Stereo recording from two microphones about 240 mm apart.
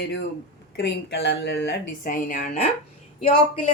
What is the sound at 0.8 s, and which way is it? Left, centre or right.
Speech, left.